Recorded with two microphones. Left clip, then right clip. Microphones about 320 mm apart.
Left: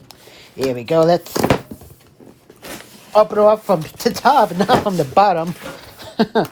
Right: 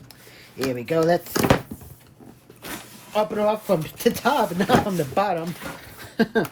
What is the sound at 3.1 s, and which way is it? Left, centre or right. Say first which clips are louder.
Speech: left 10 dB; centre.